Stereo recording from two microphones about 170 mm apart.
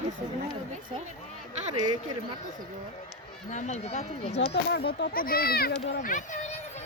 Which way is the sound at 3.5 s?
45° left (ahead or behind).